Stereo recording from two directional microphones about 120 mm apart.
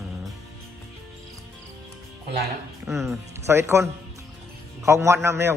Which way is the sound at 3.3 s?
20° right (ahead or behind).